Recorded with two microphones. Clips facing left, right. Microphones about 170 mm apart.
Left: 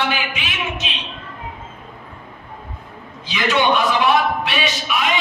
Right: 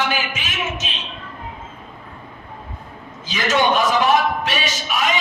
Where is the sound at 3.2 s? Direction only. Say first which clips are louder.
Even; 45° right (ahead or behind).